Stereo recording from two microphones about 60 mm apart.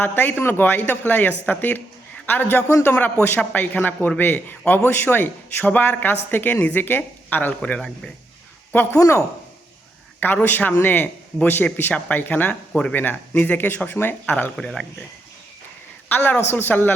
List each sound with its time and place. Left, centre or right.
0.0 s a man's voice: left
9.0 s speech: left
10.4 s a man's voice: left
16.0 s a man's voice: left